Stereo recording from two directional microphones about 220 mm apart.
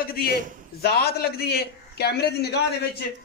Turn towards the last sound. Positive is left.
turn(degrees=45)  # may be behind; listen again after turning